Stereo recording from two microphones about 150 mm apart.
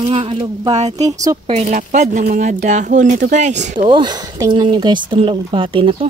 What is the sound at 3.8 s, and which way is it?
Speech, 30° right (ahead or behind).